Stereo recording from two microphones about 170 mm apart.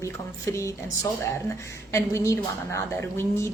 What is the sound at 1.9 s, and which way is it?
Speech, 15° left (ahead or behind).